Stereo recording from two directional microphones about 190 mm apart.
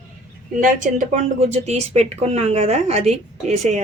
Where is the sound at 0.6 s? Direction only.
45° right (ahead or behind).